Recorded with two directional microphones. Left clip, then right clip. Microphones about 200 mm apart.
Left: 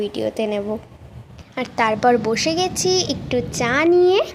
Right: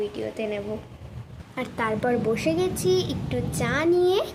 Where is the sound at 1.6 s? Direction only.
20° left (ahead or behind).